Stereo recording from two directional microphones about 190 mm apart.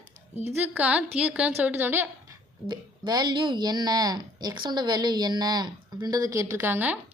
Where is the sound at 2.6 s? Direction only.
20° right (ahead or behind).